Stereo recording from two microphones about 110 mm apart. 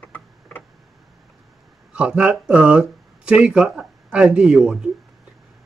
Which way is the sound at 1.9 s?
10° right (ahead or behind).